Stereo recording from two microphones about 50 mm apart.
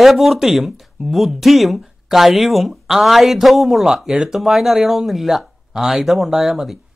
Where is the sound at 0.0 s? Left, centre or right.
Centre.